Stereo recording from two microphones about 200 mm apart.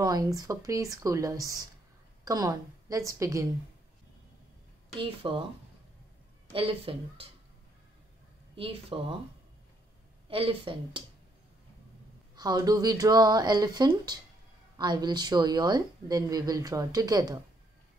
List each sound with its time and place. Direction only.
0.0 s speech: 20° right (ahead or behind)
5.0 s speech: 25° right (ahead or behind)
6.5 s speech: 25° right (ahead or behind)
8.5 s speech: 25° right (ahead or behind)
10.2 s speech: 25° right (ahead or behind)
12.4 s speech: 20° right (ahead or behind)